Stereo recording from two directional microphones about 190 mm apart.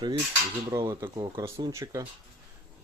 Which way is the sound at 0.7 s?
15° right (ahead or behind).